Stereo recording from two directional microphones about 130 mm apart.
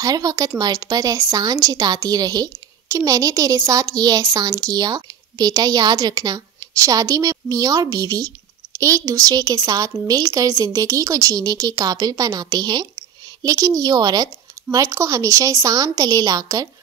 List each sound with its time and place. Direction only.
0.0 s speech: 30° right (ahead or behind)